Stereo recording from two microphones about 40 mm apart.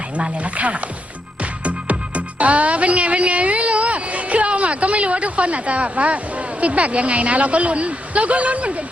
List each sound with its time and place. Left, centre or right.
0.2 s speech: right
1.4 s music: right